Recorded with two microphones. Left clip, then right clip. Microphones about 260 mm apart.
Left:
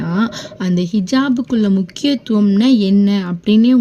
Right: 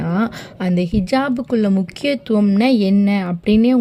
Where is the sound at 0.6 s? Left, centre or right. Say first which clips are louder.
Even; right.